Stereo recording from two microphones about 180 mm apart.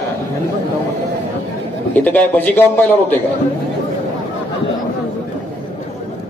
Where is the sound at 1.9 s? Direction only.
10° left (ahead or behind).